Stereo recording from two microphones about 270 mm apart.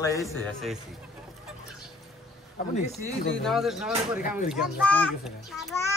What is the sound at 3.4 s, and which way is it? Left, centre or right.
A child's voice, centre.